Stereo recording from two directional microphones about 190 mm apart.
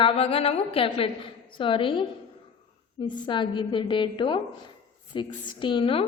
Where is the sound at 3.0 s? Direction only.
25° left (ahead or behind).